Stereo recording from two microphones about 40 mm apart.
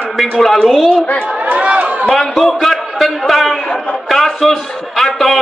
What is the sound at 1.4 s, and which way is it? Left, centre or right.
Speech, right.